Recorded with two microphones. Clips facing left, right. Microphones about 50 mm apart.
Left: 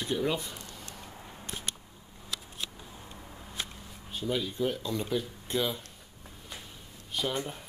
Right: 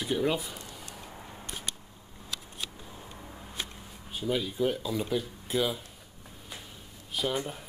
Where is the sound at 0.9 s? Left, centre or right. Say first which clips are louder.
Right 1 dB; centre.